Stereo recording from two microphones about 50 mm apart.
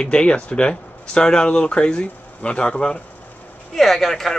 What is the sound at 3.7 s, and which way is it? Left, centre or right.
Speech, centre.